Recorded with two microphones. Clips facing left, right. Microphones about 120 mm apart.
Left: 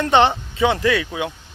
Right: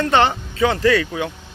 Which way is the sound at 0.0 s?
20° left (ahead or behind).